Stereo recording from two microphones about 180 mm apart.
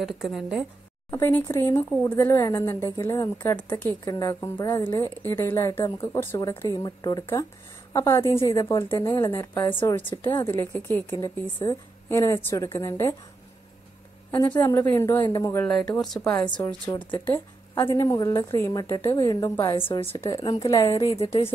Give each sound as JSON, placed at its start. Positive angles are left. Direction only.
{"t": 0.0, "sound": "a woman's voice", "side_deg": 0}
{"t": 1.1, "sound": "a woman's voice", "side_deg": 10}
{"t": 14.6, "sound": "a woman's voice", "side_deg": 10}
{"t": 15.6, "sound": "a woman's voice", "side_deg": 5}
{"t": 16.4, "sound": "a woman's voice", "side_deg": 25}
{"t": 19.9, "sound": "a woman's voice", "side_deg": 30}